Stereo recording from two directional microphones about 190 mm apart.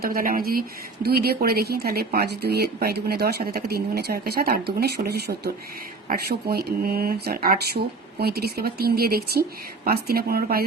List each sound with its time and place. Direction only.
0.0 s speech: 50° right (ahead or behind)